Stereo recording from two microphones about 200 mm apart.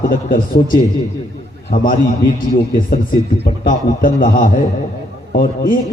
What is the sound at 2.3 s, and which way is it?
A man's voice, 45° left (ahead or behind).